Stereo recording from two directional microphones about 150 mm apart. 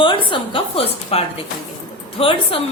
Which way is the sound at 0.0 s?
35° left (ahead or behind).